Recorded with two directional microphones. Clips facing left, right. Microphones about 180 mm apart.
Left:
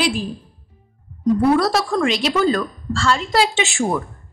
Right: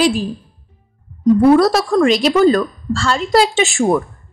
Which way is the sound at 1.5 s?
45° right (ahead or behind).